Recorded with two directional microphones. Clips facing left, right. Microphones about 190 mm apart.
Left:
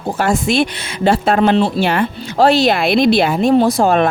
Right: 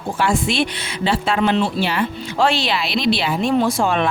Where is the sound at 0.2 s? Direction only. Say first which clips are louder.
Left 4 dB; 45° left (ahead or behind).